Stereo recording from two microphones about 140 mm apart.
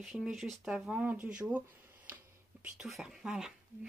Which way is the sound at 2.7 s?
5° right (ahead or behind).